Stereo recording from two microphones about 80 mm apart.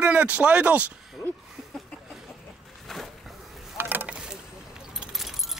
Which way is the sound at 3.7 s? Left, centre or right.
Right.